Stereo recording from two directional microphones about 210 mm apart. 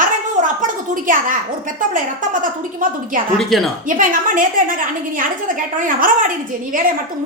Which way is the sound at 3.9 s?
40° right (ahead or behind).